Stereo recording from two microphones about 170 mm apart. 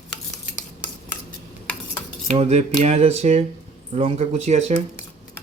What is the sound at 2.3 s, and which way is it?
Music, 40° right (ahead or behind).